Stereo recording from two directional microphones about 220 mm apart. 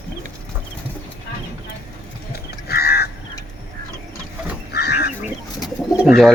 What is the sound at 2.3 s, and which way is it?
Livestock, 45° left (ahead or behind).